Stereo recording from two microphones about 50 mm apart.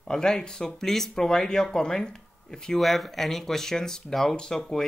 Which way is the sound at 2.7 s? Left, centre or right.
Centre.